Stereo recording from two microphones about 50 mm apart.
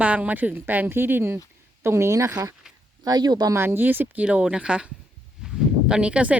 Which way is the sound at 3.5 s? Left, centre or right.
Right.